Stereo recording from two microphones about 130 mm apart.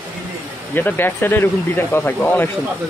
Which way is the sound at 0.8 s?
15° left (ahead or behind).